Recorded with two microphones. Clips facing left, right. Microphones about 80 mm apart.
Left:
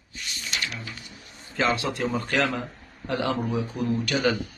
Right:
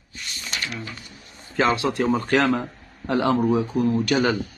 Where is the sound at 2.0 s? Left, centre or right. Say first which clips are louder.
Right 5 dB; right.